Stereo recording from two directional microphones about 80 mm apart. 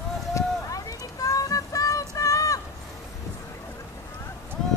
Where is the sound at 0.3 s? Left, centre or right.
Left.